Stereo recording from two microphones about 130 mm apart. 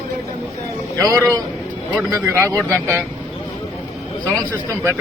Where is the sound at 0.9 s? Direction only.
25° right (ahead or behind).